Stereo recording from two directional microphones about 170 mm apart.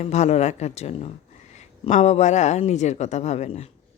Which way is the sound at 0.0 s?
40° left (ahead or behind).